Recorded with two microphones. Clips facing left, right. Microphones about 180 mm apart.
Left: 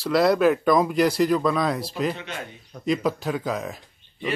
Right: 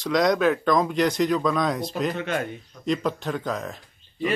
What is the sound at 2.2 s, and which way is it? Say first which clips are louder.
Speech: right 8 dB; 55° right (ahead or behind).